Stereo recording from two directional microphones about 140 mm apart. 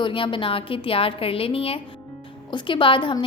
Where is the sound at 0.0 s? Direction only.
35° left (ahead or behind).